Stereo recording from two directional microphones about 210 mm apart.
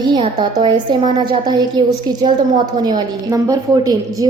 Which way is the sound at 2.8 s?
20° right (ahead or behind).